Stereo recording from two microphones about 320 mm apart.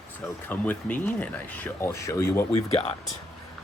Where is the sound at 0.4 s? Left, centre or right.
Centre.